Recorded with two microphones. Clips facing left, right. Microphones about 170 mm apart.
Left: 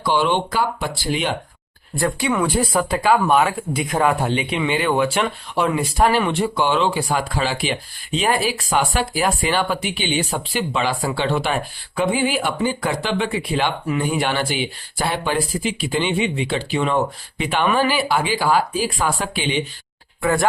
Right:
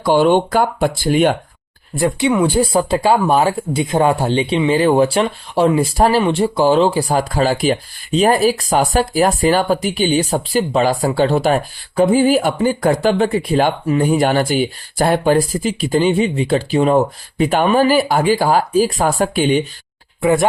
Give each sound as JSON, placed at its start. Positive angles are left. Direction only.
{"t": 0.0, "sound": "speech", "side_deg": -45}
{"t": 2.0, "sound": "speech", "side_deg": -20}
{"t": 20.2, "sound": "speech", "side_deg": -20}